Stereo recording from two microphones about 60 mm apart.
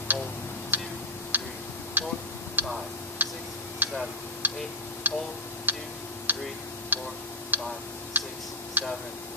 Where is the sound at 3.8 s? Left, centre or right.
Right.